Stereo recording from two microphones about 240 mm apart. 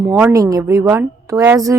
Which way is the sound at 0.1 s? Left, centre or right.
Centre.